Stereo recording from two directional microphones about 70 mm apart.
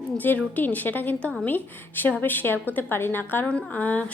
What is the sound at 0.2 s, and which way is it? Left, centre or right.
A woman's voice, left.